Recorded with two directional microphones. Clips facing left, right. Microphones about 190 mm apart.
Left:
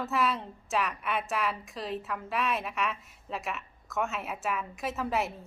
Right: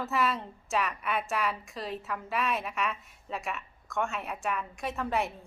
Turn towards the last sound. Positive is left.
turn(degrees=0)  # may be behind; listen again after turning